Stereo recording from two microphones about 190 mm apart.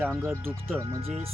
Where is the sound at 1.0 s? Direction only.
30° right (ahead or behind).